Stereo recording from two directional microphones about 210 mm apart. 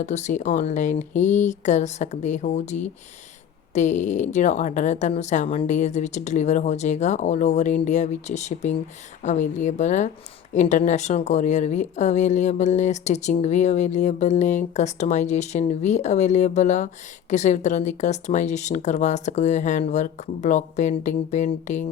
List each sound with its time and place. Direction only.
0.0 s a woman's voice: 35° left (ahead or behind)